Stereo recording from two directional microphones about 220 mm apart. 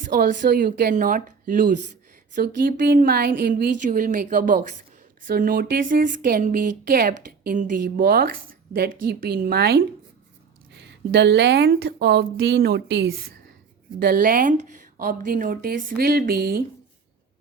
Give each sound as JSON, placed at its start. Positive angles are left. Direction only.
{"t": 0.0, "sound": "a woman's voice", "side_deg": -40}